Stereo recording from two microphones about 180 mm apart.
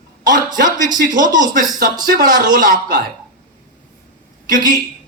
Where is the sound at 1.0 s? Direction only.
45° right (ahead or behind).